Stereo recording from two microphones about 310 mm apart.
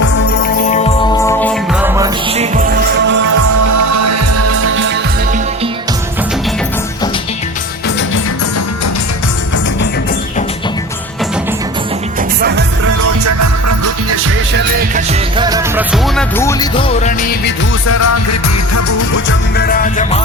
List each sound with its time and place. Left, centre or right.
0.7 s music: centre
1.8 s music: centre
2.3 s music: right
3.3 s music: right
12.4 s music: right
12.8 s music: right
14.5 s music: right
15.4 s music: centre; by 17.5 s left
17.8 s music: left
19.5 s music: left